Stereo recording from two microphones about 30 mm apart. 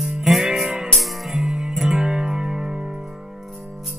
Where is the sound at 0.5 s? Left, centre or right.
Centre.